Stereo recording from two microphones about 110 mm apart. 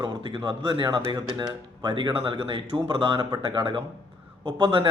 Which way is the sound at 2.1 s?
55° right (ahead or behind).